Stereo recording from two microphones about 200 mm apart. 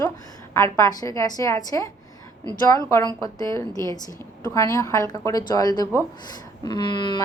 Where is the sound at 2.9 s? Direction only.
15° left (ahead or behind).